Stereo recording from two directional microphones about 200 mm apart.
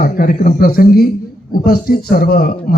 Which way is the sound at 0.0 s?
40° left (ahead or behind).